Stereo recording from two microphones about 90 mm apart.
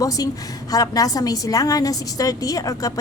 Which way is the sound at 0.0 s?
40° left (ahead or behind).